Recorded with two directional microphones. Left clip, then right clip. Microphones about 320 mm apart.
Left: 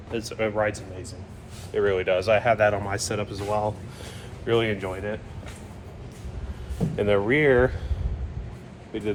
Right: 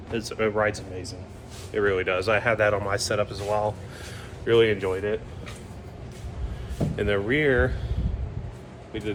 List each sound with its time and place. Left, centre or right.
0.1 s speech: centre
6.9 s speech: centre
8.9 s speech: centre